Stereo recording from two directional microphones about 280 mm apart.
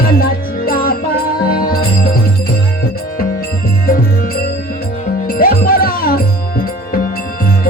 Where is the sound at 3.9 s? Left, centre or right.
Left.